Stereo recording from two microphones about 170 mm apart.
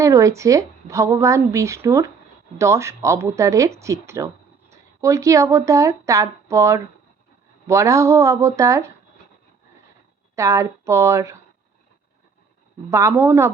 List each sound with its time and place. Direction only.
0.0 s a woman's voice: 20° right (ahead or behind)
10.3 s speech: 20° right (ahead or behind)
12.9 s speech: 15° right (ahead or behind)